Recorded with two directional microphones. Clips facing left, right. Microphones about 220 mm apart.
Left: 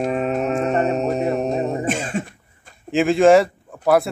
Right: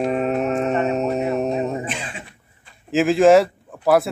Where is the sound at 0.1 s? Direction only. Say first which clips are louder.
Even; centre (ahead or behind).